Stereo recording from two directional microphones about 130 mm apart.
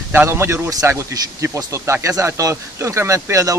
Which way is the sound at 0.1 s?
15° right (ahead or behind).